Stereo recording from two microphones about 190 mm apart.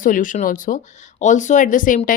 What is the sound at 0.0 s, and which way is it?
Speech, 45° left (ahead or behind).